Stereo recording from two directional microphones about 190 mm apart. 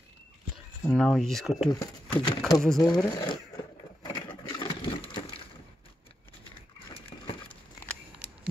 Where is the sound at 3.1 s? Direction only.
20° left (ahead or behind).